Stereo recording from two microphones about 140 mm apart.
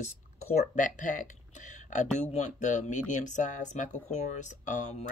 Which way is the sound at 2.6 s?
60° left (ahead or behind).